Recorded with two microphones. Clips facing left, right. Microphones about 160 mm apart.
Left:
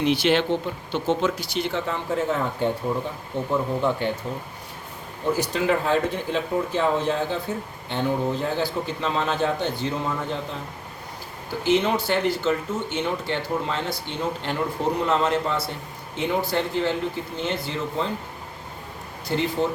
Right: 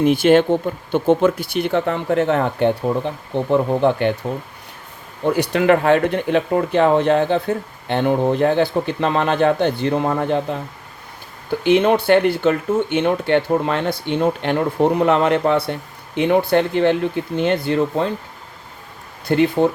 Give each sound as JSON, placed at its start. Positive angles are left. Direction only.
{"t": 0.0, "sound": "speech", "side_deg": -50}
{"t": 5.3, "sound": "speech", "side_deg": -65}
{"t": 11.6, "sound": "speech", "side_deg": -60}
{"t": 19.3, "sound": "speech", "side_deg": -60}